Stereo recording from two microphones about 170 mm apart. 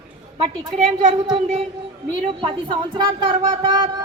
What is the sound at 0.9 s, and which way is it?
A woman's voice, 35° right (ahead or behind).